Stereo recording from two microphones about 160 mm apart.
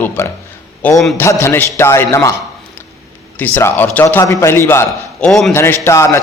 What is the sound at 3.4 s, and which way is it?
A man's voice, 10° left (ahead or behind).